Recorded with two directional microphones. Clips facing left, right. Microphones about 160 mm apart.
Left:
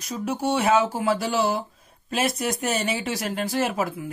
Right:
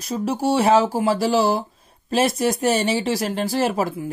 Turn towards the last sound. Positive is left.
turn(degrees=-35)  # may be behind; listen again after turning